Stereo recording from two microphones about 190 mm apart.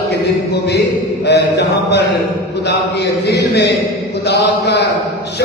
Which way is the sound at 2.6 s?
60° left (ahead or behind).